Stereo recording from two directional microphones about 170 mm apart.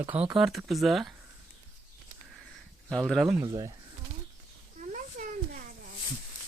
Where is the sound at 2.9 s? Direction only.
Centre (ahead or behind).